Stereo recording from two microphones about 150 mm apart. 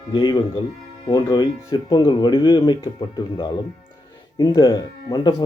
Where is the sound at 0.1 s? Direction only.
30° left (ahead or behind).